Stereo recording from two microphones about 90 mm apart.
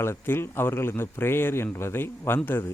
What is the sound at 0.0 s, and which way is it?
A man's voice, 25° left (ahead or behind).